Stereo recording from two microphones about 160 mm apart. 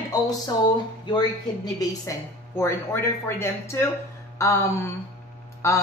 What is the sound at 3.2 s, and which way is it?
A woman's voice, 15° left (ahead or behind).